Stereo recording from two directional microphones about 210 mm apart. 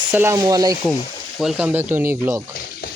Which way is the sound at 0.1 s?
10° right (ahead or behind).